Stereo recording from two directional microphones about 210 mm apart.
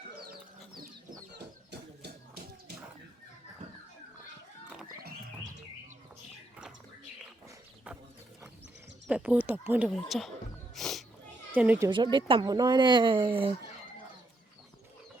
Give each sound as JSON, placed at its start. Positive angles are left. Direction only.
{"t": 2.0, "sound": "music", "side_deg": -50}
{"t": 9.0, "sound": "speech", "side_deg": -5}
{"t": 10.8, "sound": "music", "side_deg": 0}
{"t": 11.5, "sound": "speech", "side_deg": -10}
{"t": 11.9, "sound": "speech", "side_deg": -25}